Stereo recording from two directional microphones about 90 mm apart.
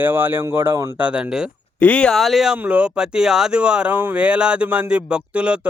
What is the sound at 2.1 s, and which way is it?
Speech, centre (ahead or behind).